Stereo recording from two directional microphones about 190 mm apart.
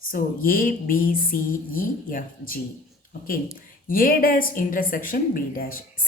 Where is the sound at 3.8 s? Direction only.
50° left (ahead or behind).